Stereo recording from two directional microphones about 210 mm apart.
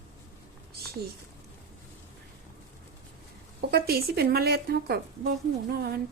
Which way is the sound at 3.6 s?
50° right (ahead or behind).